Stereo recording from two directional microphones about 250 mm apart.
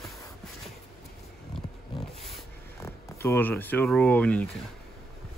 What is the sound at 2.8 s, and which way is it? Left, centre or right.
Speech, centre.